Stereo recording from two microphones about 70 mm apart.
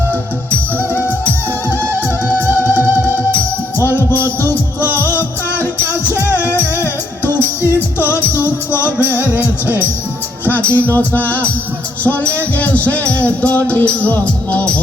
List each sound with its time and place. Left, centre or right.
0.8 s music: left
2.4 s music: left
5.0 s music: left
9.3 s music: right
10.4 s music: left